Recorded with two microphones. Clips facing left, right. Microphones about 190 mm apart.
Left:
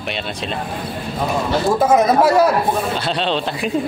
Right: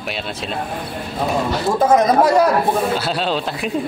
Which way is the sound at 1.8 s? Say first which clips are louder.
Right 1 dB; 5° left (ahead or behind).